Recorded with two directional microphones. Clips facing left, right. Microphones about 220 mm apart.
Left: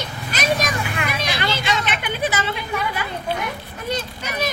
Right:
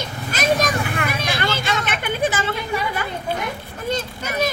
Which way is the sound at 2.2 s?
50° right (ahead or behind).